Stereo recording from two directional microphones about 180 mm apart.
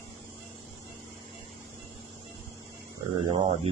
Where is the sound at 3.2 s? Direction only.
30° right (ahead or behind).